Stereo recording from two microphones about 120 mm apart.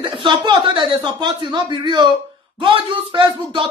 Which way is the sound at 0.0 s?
40° right (ahead or behind).